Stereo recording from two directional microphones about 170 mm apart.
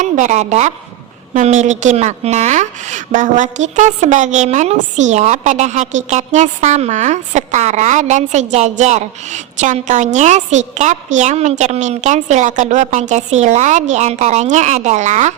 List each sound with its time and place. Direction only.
0.0 s a woman's voice: 45° right (ahead or behind)